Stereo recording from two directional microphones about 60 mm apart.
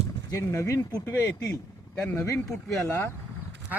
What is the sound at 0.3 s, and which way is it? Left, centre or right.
Speech, left.